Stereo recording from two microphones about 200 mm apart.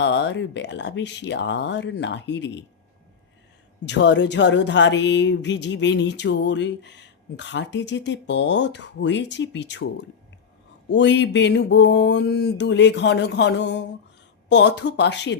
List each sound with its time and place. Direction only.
0.0 s a woman's voice: 60° left (ahead or behind)
3.8 s a woman's voice: 60° left (ahead or behind)